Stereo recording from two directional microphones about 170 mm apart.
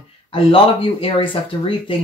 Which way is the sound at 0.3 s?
30° left (ahead or behind).